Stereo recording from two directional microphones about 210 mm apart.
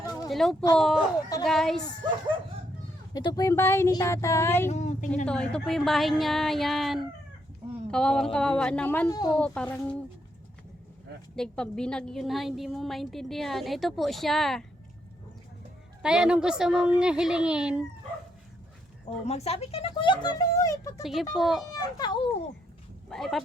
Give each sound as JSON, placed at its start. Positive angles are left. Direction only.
{"t": 0.1, "sound": "a sound", "side_deg": 0}
{"t": 0.8, "sound": "a woman's voice", "side_deg": 0}
{"t": 3.1, "sound": "speech", "side_deg": 20}
{"t": 4.7, "sound": "a woman's voice", "side_deg": 35}
{"t": 5.2, "sound": "a woman's voice", "side_deg": 5}
{"t": 9.0, "sound": "speech", "side_deg": 20}
{"t": 9.4, "sound": "a woman's voice", "side_deg": 5}
{"t": 11.3, "sound": "a woman's voice", "side_deg": 5}
{"t": 16.0, "sound": "a woman's voice", "side_deg": -5}
{"t": 19.2, "sound": "speech", "side_deg": 30}
{"t": 21.0, "sound": "a woman's voice", "side_deg": 0}
{"t": 21.7, "sound": "speech", "side_deg": 20}
{"t": 23.0, "sound": "a woman's voice", "side_deg": 0}